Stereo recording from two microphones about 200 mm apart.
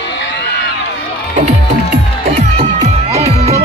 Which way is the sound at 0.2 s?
60° left (ahead or behind).